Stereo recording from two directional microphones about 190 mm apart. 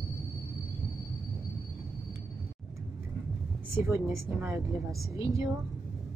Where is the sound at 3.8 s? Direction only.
15° right (ahead or behind).